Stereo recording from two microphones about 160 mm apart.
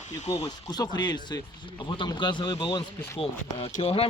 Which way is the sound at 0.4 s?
25° left (ahead or behind).